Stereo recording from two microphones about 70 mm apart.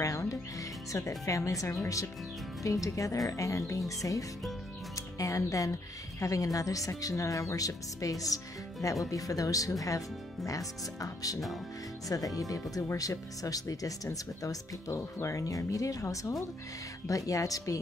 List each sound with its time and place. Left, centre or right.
0.0 s speech: left